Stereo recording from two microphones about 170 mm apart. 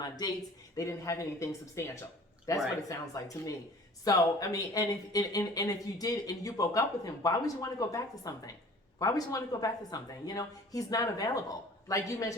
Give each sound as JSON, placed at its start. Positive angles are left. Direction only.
{"t": 0.8, "sound": "speech", "side_deg": 20}